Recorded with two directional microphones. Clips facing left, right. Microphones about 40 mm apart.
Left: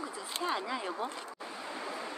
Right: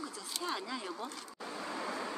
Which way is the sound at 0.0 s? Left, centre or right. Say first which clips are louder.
Left 4 dB; left.